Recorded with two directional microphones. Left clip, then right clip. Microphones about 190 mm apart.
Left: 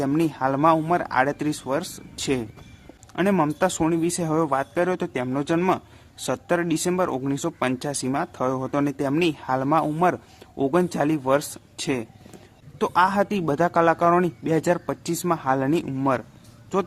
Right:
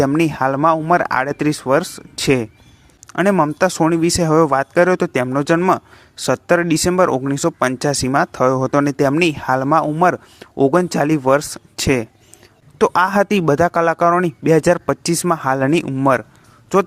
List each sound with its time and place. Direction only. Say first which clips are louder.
0.2 s speech: right 6 dB; 35° right (ahead or behind)